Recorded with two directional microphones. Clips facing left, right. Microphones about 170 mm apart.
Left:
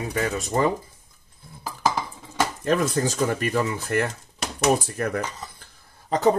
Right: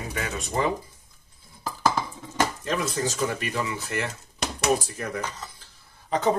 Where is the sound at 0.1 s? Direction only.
40° left (ahead or behind).